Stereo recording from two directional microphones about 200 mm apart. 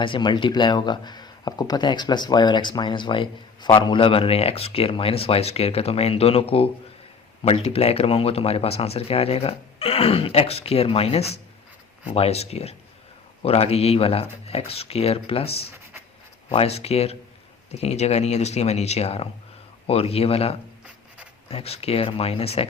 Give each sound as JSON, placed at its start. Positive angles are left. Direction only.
{"t": 0.0, "sound": "speech", "side_deg": 25}